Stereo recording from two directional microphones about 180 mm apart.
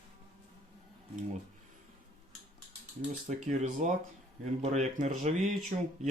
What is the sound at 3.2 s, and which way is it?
Speech, 45° right (ahead or behind).